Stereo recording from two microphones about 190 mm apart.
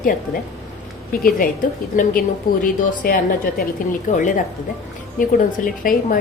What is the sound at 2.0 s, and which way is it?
A woman's voice, 45° left (ahead or behind).